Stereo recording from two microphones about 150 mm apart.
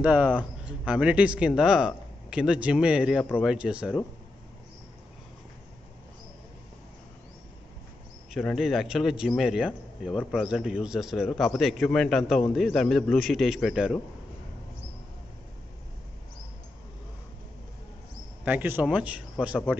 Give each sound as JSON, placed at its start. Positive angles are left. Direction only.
{"t": 0.0, "sound": "a man's voice", "side_deg": -10}
{"t": 8.3, "sound": "a man's voice", "side_deg": 0}
{"t": 18.4, "sound": "speech", "side_deg": -10}